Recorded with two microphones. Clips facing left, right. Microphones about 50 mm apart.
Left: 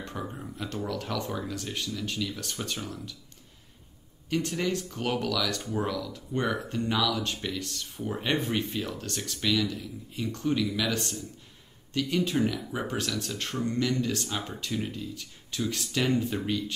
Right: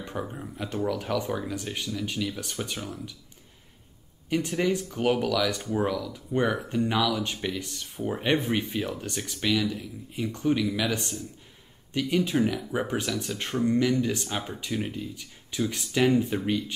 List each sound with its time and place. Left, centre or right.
0.0 s speech: centre
4.3 s speech: centre